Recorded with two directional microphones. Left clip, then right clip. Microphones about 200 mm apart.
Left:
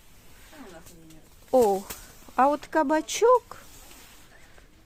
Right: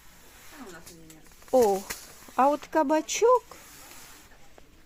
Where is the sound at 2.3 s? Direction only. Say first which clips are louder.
Left 1 dB; 10° left (ahead or behind).